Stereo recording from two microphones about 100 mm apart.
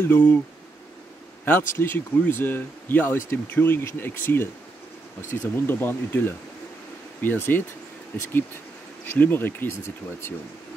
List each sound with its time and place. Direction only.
0.0 s speech: 20° left (ahead or behind)
1.4 s speech: 20° left (ahead or behind)
9.0 s speech: 20° left (ahead or behind)